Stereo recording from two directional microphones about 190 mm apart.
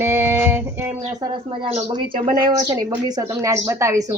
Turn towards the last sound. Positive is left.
turn(degrees=-15)  # may be behind; listen again after turning